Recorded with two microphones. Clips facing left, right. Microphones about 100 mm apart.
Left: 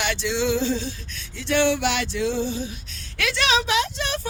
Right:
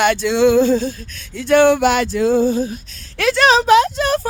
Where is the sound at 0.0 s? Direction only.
50° right (ahead or behind).